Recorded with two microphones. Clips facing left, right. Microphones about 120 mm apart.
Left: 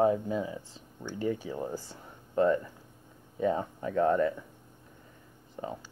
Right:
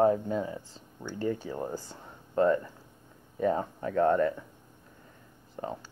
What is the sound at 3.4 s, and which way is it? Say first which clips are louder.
Speech: right 1 dB; 40° right (ahead or behind).